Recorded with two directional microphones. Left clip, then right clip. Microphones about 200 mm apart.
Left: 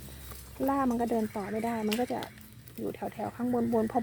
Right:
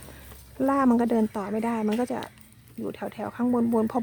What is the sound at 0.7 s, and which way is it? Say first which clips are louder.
Speech: right 6 dB; 30° right (ahead or behind).